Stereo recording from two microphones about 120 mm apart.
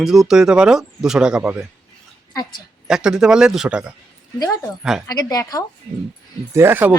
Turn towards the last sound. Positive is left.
turn(degrees=-15)  # may be behind; listen again after turning